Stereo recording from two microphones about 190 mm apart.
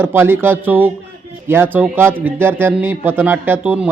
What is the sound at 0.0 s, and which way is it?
A man's voice, 10° right (ahead or behind).